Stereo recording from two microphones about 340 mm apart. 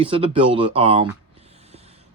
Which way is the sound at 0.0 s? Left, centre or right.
Centre.